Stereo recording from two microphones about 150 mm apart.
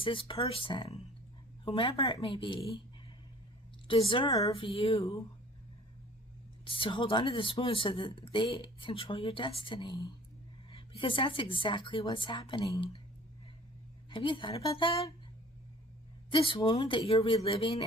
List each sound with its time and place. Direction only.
0.0 s speech: 35° left (ahead or behind)
4.1 s speech: 30° left (ahead or behind)
6.7 s speech: 35° left (ahead or behind)
14.1 s speech: 35° left (ahead or behind)
16.3 s speech: 35° left (ahead or behind)